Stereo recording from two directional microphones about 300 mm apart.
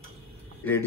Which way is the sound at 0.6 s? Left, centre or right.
Centre.